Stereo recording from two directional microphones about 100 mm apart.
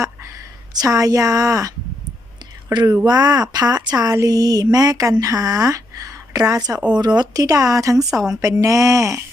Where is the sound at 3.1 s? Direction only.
40° right (ahead or behind).